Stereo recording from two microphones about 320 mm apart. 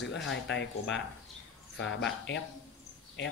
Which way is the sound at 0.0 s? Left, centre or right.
Left.